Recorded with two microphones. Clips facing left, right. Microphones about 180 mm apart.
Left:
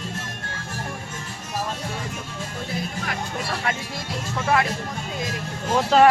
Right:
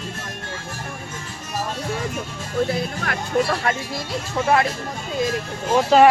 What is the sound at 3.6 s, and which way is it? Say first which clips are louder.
Speech: right 4 dB; 40° right (ahead or behind).